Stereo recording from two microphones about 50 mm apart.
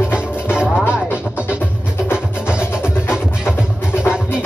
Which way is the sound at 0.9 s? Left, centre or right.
Right.